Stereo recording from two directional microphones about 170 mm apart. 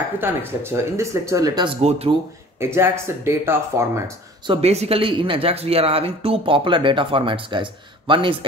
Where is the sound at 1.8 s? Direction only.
35° right (ahead or behind).